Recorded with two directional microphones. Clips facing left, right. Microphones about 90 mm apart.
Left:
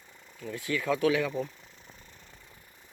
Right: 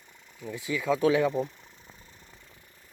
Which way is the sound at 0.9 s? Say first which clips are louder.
Right 5 dB; 30° right (ahead or behind).